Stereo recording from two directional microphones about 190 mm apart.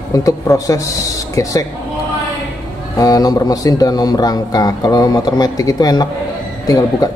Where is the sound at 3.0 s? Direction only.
20° left (ahead or behind).